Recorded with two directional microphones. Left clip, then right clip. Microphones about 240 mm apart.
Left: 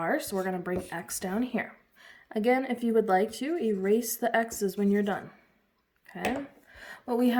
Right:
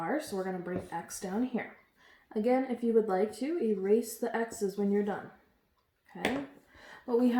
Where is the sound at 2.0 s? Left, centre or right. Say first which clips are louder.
Left 4 dB; left.